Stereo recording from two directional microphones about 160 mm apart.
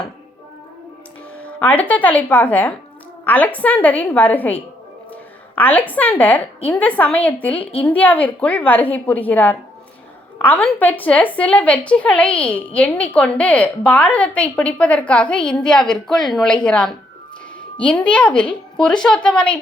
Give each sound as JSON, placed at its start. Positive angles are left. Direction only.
{"t": 1.4, "sound": "a woman's voice", "side_deg": 10}
{"t": 5.5, "sound": "a woman's voice", "side_deg": 10}
{"t": 7.6, "sound": "a woman's voice", "side_deg": 35}
{"t": 7.9, "sound": "a woman's voice", "side_deg": 10}